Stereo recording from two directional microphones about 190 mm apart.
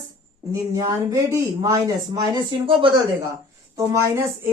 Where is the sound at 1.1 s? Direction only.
20° right (ahead or behind).